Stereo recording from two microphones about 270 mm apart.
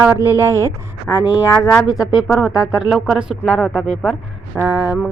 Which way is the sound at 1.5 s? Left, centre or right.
Centre.